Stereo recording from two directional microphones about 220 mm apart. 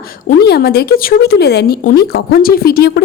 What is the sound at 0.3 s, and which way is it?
Speech, 45° left (ahead or behind).